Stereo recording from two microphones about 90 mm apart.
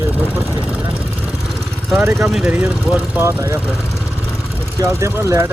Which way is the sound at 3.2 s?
30° right (ahead or behind).